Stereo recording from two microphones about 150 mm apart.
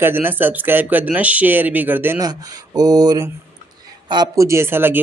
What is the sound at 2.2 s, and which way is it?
Speech, 25° right (ahead or behind).